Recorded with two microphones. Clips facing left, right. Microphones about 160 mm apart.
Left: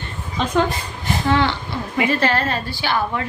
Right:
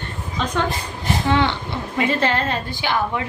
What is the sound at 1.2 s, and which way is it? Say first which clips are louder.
A woman's voice: left 1 dB; 20° right (ahead or behind).